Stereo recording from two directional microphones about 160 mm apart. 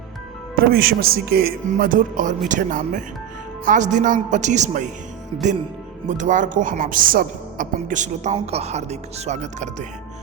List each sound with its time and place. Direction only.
0.7 s music: 70° right (ahead or behind)
2.5 s a woman's voice: 55° right (ahead or behind)
5.3 s speech: 35° right (ahead or behind)
6.1 s a woman's voice: 50° right (ahead or behind)